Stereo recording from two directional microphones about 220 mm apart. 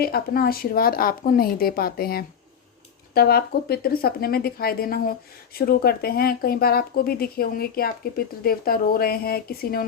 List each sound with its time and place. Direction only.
0.0 s speech: 45° left (ahead or behind)